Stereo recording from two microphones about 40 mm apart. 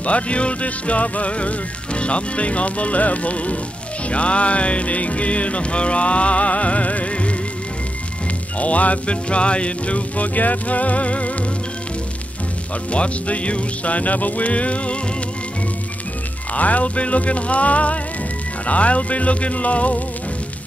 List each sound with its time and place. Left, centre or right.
0.0 s music: left
8.5 s music: left
12.9 s music: left
16.5 s music: left